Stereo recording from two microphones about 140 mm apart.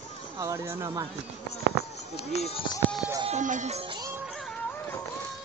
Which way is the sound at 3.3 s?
60° right (ahead or behind).